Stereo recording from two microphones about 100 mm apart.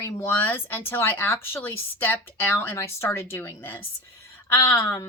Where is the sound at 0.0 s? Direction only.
20° left (ahead or behind).